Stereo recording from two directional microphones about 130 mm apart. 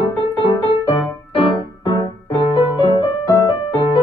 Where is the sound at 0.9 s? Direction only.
40° left (ahead or behind).